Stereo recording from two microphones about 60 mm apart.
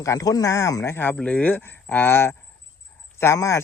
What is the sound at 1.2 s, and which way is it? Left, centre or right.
Speech, centre.